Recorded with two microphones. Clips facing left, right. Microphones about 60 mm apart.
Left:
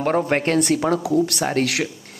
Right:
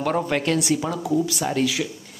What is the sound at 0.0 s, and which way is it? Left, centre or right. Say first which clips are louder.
Speech: left 3 dB; left.